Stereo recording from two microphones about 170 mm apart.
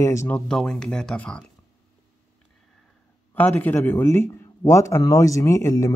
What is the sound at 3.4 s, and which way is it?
Speech, 10° left (ahead or behind).